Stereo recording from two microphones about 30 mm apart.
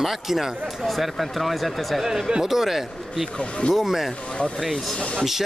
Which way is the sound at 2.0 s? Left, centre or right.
Centre.